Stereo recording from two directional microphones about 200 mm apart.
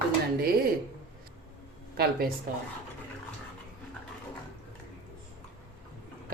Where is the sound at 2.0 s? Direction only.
50° right (ahead or behind).